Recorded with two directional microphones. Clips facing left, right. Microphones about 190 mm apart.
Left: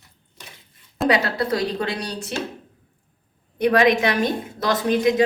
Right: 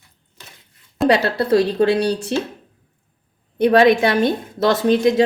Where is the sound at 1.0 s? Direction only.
30° right (ahead or behind).